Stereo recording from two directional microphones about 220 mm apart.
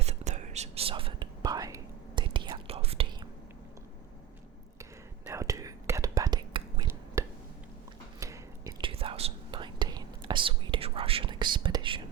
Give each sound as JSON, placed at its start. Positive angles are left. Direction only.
{"t": 0.0, "sound": "whispering", "side_deg": -30}
{"t": 5.3, "sound": "whispering", "side_deg": -15}